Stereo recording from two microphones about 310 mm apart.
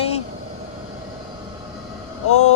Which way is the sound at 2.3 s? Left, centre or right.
Left.